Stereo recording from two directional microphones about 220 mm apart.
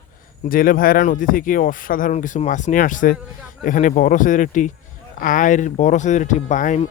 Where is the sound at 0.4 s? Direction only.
40° left (ahead or behind).